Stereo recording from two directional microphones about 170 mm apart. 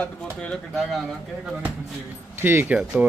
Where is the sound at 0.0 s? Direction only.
5° left (ahead or behind).